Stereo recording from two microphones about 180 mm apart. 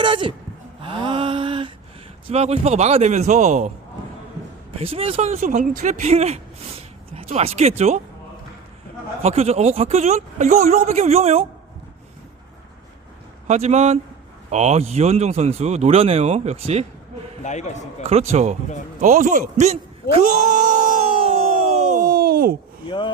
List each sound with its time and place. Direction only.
0.0 s a sound: 25° right (ahead or behind)
2.3 s speech: 35° right (ahead or behind)
4.8 s speech: 30° right (ahead or behind)
9.2 s speech: 35° right (ahead or behind)
13.5 s speech: 40° right (ahead or behind)
17.4 s a man's voice: 40° left (ahead or behind)
18.0 s speech: 35° right (ahead or behind)
22.0 s groan: 55° right (ahead or behind)